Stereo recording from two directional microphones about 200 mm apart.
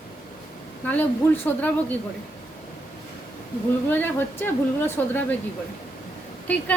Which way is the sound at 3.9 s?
10° left (ahead or behind).